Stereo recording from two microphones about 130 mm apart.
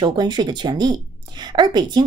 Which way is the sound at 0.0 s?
35° right (ahead or behind).